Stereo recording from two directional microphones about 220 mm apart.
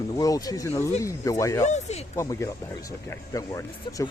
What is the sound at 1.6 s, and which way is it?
Speech, 30° left (ahead or behind).